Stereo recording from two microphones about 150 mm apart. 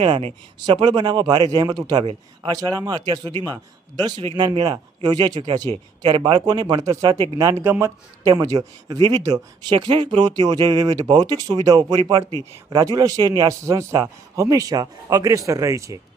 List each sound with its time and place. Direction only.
0.0 s speech: 40° right (ahead or behind); by 16.0 s 20° right (ahead or behind)